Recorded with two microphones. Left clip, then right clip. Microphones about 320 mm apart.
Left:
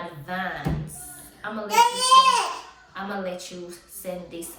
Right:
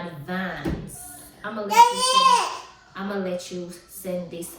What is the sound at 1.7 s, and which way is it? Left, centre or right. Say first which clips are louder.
Speech: even; centre.